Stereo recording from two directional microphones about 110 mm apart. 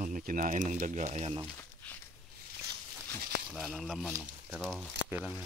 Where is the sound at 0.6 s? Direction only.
90° right.